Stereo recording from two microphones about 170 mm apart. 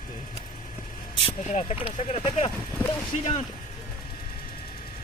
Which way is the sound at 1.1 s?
35° left (ahead or behind).